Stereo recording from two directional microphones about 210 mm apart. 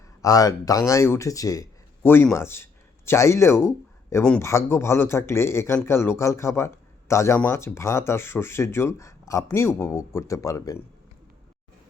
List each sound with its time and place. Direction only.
0.2 s speech: 15° left (ahead or behind)